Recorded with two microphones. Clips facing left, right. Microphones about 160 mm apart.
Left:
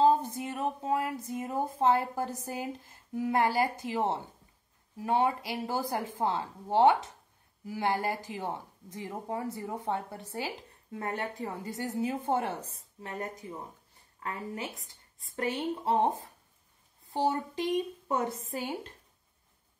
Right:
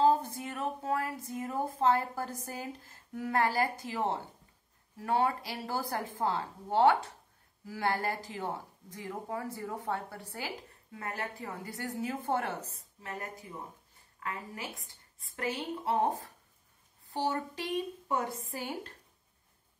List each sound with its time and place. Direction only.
0.0 s speech: 20° left (ahead or behind)